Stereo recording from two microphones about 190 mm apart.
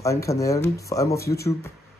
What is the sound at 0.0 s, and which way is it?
Speech, 15° left (ahead or behind).